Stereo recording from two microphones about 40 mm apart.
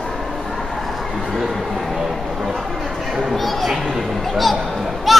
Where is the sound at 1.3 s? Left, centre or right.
Centre.